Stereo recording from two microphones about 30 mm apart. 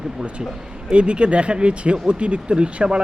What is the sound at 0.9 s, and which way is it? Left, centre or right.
A man's voice, right.